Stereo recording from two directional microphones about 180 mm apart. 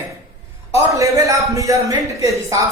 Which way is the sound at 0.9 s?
20° right (ahead or behind).